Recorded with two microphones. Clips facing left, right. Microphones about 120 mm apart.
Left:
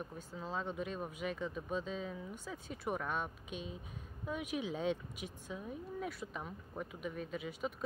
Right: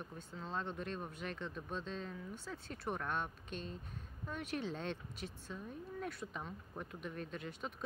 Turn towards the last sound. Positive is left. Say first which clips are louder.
# left 4 dB
turn(degrees=5)  # may be behind; listen again after turning